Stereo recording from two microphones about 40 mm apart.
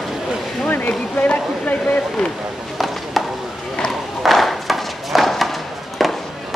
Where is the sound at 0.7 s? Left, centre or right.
Left.